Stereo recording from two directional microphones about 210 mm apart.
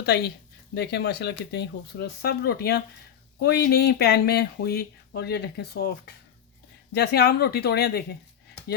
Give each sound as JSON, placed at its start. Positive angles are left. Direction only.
{"t": 0.0, "sound": "speech", "side_deg": 50}